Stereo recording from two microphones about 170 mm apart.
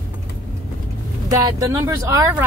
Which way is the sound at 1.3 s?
20° right (ahead or behind).